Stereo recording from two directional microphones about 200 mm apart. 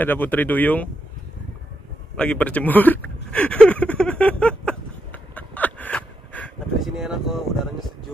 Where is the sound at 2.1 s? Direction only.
5° left (ahead or behind).